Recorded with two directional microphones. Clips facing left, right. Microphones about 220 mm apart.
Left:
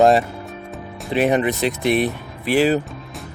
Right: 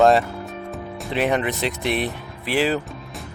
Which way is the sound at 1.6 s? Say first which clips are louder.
Left 5 dB; 45° left (ahead or behind).